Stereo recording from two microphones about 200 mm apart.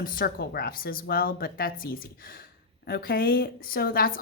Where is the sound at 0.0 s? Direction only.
45° left (ahead or behind).